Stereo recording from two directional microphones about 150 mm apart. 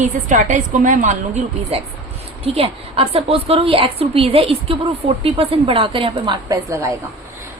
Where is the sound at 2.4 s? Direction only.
40° right (ahead or behind); by 6.9 s 20° right (ahead or behind).